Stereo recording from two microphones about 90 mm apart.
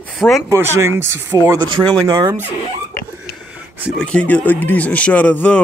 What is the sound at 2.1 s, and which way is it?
Speech, 45° right (ahead or behind).